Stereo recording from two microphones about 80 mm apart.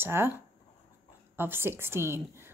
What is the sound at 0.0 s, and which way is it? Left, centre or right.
Speech, right.